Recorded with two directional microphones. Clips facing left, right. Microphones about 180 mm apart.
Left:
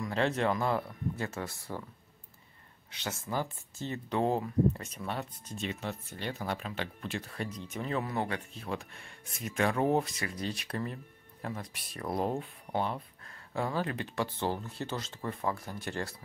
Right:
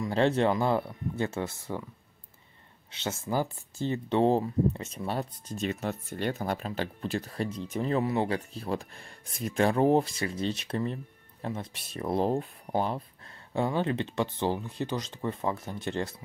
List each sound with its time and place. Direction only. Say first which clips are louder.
0.0 s speech: right 5 dB; 30° right (ahead or behind)
2.9 s speech: right 5 dB; 25° right (ahead or behind)
13.5 s speech: right 5 dB; 25° right (ahead or behind)